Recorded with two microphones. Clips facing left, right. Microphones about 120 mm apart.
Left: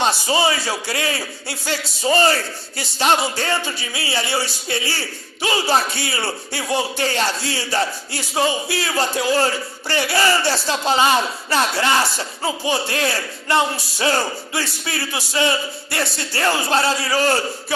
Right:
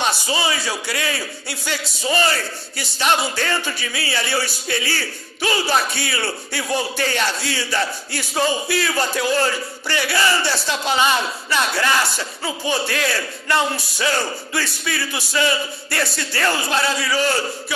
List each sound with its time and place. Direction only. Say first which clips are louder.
0.0 s a man's voice: left 3 dB; 30° left (ahead or behind)